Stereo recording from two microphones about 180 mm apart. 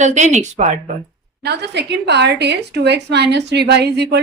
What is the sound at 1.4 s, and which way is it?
A woman's voice, 65° right (ahead or behind).